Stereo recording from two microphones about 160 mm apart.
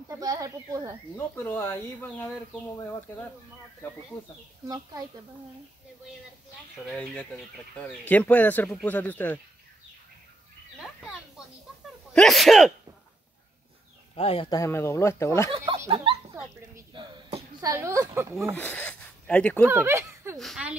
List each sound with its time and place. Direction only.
0.1 s speech: 20° right (ahead or behind)
1.1 s speech: 15° left (ahead or behind)
4.6 s speech: 25° right (ahead or behind)
7.7 s speech: 10° left (ahead or behind)
10.8 s a sound: 5° right (ahead or behind)
12.1 s speech: centre (ahead or behind)
14.1 s speech: 35° left (ahead or behind)
14.5 s speech: 15° left (ahead or behind)
15.5 s speech: 35° right (ahead or behind)
16.9 s a sound: 30° right (ahead or behind)
18.6 s speech: 10° left (ahead or behind)
19.7 s speech: 15° right (ahead or behind)
20.3 s speech: centre (ahead or behind)